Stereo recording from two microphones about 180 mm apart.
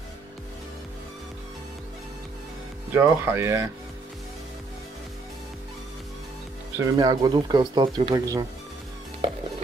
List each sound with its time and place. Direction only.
2.9 s speech: 10° right (ahead or behind)
6.8 s speech: 20° right (ahead or behind)